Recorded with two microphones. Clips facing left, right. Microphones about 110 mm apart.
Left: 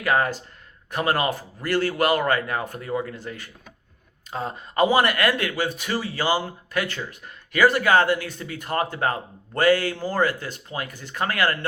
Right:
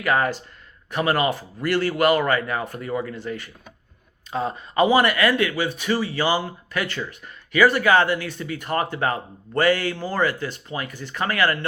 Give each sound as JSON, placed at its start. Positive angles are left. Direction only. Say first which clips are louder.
{"t": 0.0, "sound": "speech", "louder": "right 1 dB", "side_deg": 40}